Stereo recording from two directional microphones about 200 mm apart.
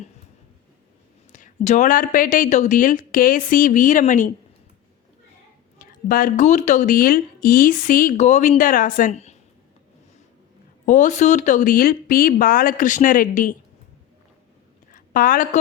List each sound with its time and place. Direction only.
1.3 s speech: 40° left (ahead or behind)
5.8 s speech: 45° left (ahead or behind)
10.8 s speech: 40° left (ahead or behind)
14.9 s a sound: 45° left (ahead or behind)